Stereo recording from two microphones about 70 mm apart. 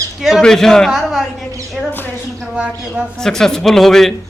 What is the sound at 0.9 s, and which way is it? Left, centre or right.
A woman's voice, centre.